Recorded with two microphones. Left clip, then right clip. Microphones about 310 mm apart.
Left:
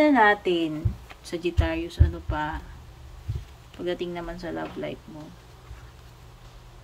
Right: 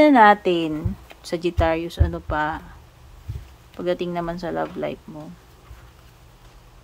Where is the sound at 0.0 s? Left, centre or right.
Right.